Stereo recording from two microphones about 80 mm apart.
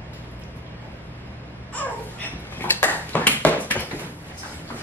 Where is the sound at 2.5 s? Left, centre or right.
Left.